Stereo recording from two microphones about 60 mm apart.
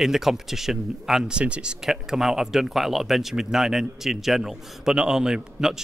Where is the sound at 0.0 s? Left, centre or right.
Centre.